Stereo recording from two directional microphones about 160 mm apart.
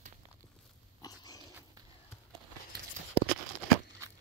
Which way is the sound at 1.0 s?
25° left (ahead or behind).